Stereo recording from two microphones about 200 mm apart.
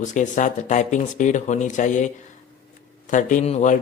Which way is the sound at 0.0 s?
40° left (ahead or behind).